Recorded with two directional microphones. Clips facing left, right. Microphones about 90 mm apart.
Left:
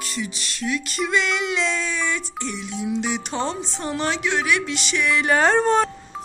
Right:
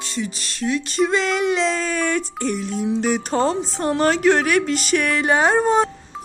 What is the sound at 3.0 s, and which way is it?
A woman's voice, 40° right (ahead or behind).